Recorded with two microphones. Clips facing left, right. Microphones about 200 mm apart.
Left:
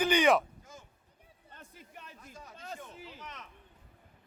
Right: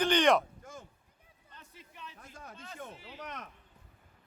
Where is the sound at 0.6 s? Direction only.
55° right (ahead or behind).